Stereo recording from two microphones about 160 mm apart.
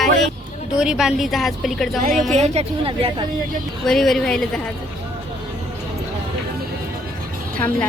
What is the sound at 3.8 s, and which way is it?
Speech, centre (ahead or behind).